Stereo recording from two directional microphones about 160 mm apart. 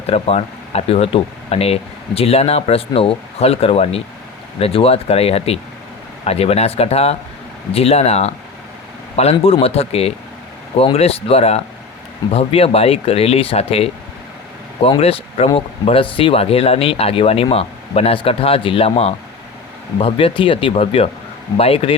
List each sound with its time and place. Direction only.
0.1 s speech: 40° left (ahead or behind)